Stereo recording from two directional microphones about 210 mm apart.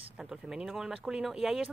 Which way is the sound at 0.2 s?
Centre (ahead or behind).